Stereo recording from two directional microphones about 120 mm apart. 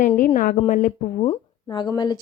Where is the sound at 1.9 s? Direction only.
35° left (ahead or behind).